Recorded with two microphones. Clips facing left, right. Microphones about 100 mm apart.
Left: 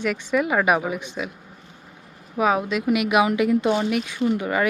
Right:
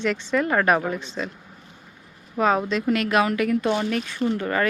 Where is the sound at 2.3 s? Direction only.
5° left (ahead or behind).